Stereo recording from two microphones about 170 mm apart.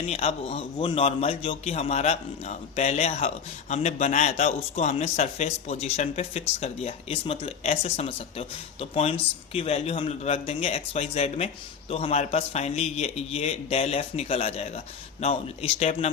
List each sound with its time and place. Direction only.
0.1 s a man's voice: 35° left (ahead or behind)